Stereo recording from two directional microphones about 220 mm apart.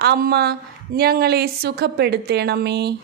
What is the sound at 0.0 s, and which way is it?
A woman's voice, 45° right (ahead or behind).